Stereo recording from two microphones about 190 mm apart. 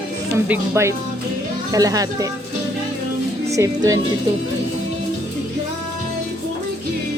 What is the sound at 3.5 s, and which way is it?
Speech, 15° right (ahead or behind).